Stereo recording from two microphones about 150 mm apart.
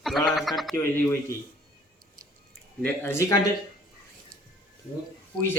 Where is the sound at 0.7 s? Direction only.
15° left (ahead or behind).